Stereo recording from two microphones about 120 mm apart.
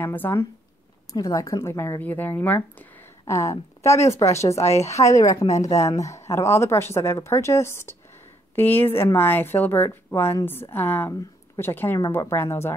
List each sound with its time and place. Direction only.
0.0 s a woman's voice: 15° left (ahead or behind)
1.1 s a woman's voice: 30° left (ahead or behind)
3.3 s a woman's voice: 25° left (ahead or behind)